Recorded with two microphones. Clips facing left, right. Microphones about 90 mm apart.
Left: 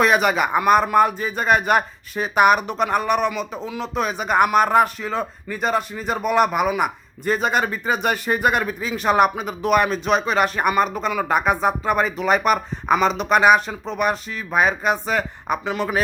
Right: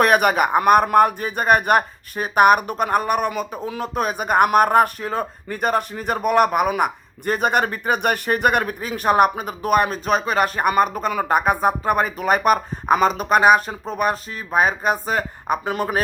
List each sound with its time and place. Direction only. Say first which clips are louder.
0.0 s speech: right 2 dB; 55° right (ahead or behind)